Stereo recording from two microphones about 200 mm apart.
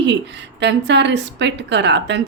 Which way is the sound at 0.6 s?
60° right (ahead or behind).